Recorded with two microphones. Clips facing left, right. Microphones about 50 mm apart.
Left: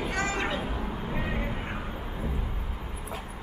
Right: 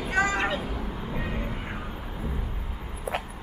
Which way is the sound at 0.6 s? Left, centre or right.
Left.